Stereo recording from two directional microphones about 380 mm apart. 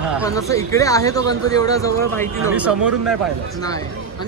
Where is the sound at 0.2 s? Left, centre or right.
Centre.